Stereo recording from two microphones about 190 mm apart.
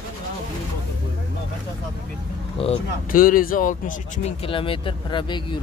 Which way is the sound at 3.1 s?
45° left (ahead or behind).